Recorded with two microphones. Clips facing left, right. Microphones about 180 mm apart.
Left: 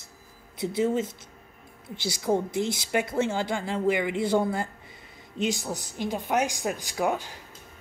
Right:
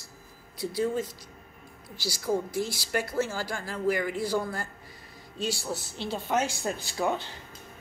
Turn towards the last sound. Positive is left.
turn(degrees=10)  # may be behind; listen again after turning